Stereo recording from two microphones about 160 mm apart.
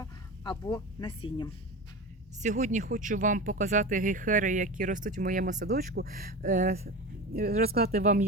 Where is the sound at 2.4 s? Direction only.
50° right (ahead or behind).